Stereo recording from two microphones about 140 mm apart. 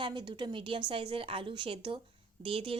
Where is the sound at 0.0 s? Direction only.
35° right (ahead or behind).